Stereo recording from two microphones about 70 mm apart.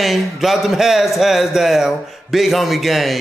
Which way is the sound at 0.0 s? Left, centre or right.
Centre.